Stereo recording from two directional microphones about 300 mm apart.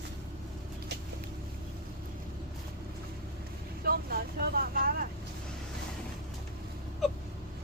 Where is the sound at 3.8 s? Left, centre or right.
Right.